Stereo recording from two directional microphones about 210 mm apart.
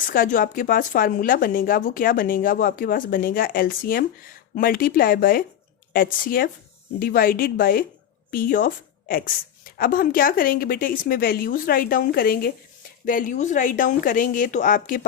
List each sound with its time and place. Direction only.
0.0 s speech: 40° left (ahead or behind)